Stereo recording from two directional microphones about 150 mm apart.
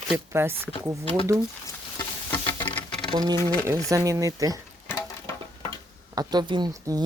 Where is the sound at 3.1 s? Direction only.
30° right (ahead or behind).